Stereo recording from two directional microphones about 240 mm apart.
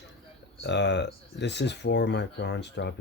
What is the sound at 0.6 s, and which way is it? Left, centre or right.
Speech, left.